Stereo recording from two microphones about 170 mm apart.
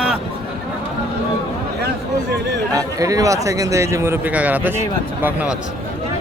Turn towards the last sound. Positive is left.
turn(degrees=-5)  # may be behind; listen again after turning